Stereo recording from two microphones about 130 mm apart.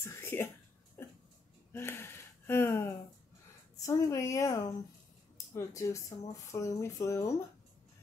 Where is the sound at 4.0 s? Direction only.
25° left (ahead or behind).